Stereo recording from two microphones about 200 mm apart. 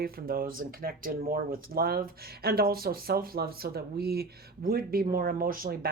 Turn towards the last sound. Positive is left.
turn(degrees=-50)  # may be behind; listen again after turning